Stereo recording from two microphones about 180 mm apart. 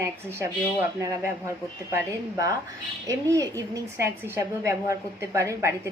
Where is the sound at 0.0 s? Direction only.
15° right (ahead or behind).